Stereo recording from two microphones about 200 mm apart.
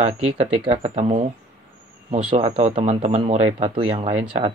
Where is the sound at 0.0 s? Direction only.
30° right (ahead or behind).